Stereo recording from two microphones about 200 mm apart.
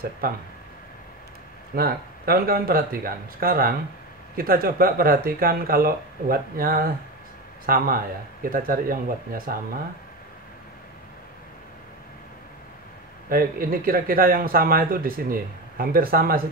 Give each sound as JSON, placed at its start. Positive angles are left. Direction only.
{"t": 1.8, "sound": "speech", "side_deg": -50}
{"t": 13.3, "sound": "speech", "side_deg": -45}